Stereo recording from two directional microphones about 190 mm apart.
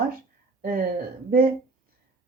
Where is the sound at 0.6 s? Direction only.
50° right (ahead or behind).